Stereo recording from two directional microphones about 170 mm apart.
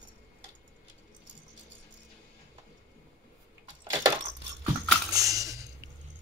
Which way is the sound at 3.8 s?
20° right (ahead or behind).